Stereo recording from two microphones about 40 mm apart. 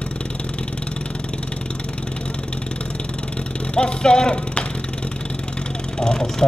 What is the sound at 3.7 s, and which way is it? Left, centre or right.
Speech, left.